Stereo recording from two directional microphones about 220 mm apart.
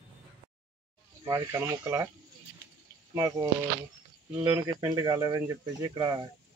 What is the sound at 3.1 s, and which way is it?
Speech, 15° right (ahead or behind).